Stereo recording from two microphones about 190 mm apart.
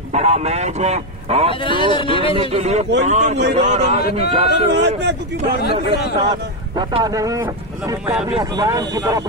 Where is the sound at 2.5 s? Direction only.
35° right (ahead or behind).